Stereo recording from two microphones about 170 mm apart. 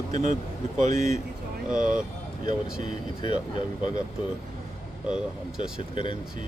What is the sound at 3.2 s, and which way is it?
Speech, 30° left (ahead or behind).